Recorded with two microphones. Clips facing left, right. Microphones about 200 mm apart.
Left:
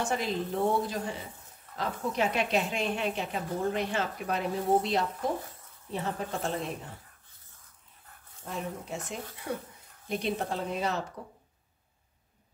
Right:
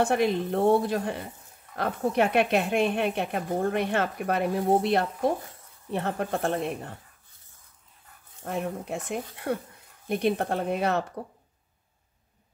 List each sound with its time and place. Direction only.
0.0 s speech: 60° right (ahead or behind)
8.5 s speech: 60° right (ahead or behind)